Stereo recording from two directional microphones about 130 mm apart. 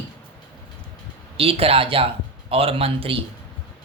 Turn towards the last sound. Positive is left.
turn(degrees=-45)  # may be behind; listen again after turning